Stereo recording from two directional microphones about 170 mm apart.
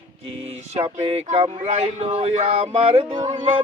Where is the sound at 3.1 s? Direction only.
25° right (ahead or behind).